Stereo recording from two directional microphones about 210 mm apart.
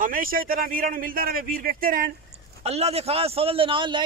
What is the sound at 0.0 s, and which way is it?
A man's voice, 45° right (ahead or behind).